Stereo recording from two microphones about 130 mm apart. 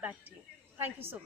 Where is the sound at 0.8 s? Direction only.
15° right (ahead or behind).